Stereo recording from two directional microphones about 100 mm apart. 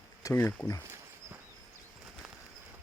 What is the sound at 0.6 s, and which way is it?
Speech, 35° left (ahead or behind).